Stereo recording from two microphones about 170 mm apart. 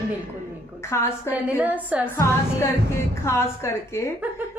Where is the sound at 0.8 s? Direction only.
15° left (ahead or behind).